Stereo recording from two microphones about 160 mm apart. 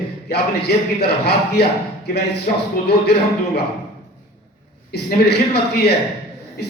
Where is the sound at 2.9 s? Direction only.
90° left.